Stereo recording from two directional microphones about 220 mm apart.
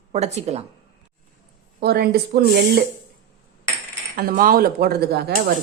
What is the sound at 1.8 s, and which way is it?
Speech, 45° right (ahead or behind).